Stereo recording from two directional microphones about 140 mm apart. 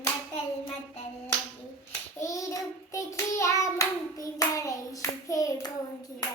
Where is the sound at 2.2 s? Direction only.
25° left (ahead or behind).